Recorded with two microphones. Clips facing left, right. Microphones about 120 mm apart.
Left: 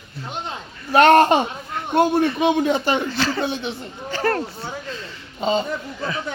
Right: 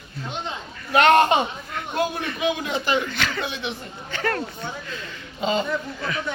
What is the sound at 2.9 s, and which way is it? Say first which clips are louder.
A man's voice: left 3 dB; 30° left (ahead or behind).